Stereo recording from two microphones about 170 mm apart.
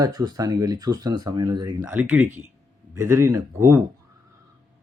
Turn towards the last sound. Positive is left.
turn(degrees=-15)  # may be behind; listen again after turning